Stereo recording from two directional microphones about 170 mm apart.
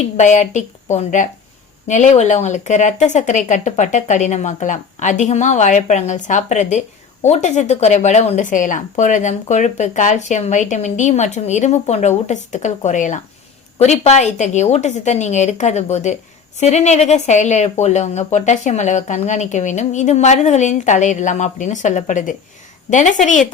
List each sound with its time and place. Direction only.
0.0 s speech: 45° left (ahead or behind)